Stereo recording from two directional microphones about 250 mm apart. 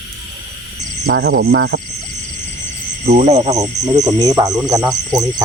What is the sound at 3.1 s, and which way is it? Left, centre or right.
Speech, right.